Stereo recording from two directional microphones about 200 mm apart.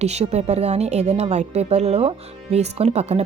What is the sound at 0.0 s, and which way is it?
Speech, 35° right (ahead or behind).